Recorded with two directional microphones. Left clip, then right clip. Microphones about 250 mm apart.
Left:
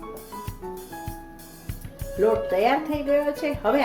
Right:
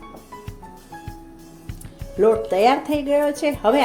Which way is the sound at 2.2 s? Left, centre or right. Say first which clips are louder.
Right 5 dB; right.